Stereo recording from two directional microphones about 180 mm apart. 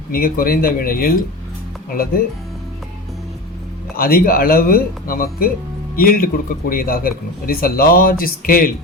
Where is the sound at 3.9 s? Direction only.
55° left (ahead or behind).